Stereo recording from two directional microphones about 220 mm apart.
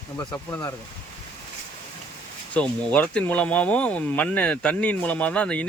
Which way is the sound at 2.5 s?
5° left (ahead or behind).